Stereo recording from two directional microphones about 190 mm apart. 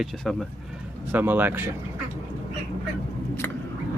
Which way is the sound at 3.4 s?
10° left (ahead or behind).